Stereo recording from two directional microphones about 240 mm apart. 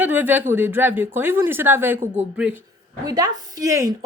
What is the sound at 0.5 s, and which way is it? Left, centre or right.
A woman's voice, centre.